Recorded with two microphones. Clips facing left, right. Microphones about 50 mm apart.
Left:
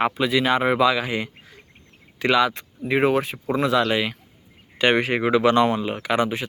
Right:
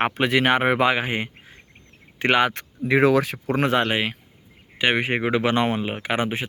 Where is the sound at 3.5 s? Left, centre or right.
Right.